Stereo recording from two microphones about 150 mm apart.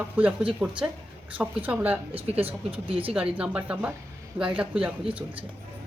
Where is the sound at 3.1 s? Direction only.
10° right (ahead or behind).